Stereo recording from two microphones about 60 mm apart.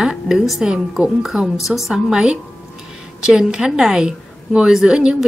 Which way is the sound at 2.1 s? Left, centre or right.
Centre.